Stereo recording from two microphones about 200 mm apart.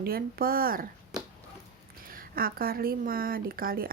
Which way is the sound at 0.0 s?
50° right (ahead or behind).